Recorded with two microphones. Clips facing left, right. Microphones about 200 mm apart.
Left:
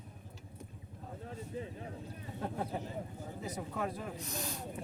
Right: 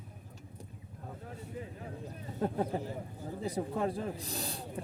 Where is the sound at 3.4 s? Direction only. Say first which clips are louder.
Right 6 dB; 30° right (ahead or behind).